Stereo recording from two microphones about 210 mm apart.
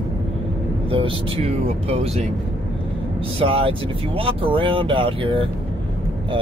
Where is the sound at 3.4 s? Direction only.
25° right (ahead or behind).